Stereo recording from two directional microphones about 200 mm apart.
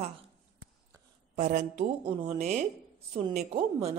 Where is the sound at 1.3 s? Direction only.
35° right (ahead or behind).